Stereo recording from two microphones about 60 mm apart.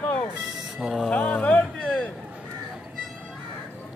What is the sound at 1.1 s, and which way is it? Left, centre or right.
Speech, centre.